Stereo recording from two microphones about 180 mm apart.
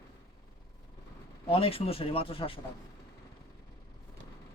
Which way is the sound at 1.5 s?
30° left (ahead or behind).